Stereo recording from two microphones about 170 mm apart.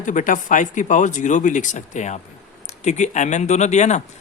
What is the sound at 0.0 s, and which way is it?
A man's voice, 45° left (ahead or behind).